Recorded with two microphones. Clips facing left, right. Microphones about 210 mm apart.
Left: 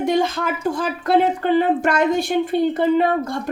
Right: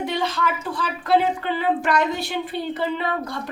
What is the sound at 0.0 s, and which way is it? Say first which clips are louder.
Speech: left 5 dB; 45° left (ahead or behind).